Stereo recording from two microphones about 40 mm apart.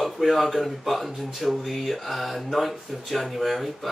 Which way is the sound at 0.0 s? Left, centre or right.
Centre.